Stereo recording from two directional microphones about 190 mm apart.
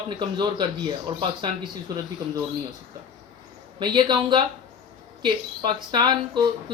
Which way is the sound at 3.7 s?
25° right (ahead or behind).